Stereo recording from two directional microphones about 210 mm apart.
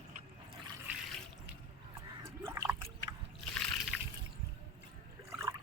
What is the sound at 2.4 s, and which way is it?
Liquid, 15° right (ahead or behind).